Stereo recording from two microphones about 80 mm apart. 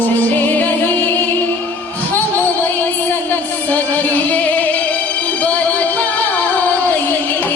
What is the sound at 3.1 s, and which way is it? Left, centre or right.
Music, left.